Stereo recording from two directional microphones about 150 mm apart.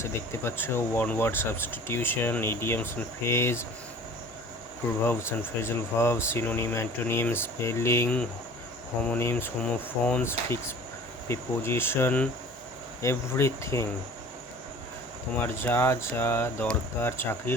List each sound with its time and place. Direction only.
0.0 s speech: 15° left (ahead or behind)
5.0 s speech: 15° left (ahead or behind)
15.4 s speech: 15° left (ahead or behind)